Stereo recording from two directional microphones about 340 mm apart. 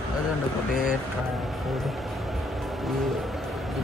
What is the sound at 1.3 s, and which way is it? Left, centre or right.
Vehicle, centre.